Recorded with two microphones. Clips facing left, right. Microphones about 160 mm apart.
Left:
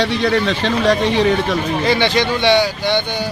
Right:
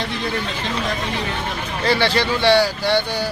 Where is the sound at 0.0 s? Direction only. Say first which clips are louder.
Left 8 dB; 80° left.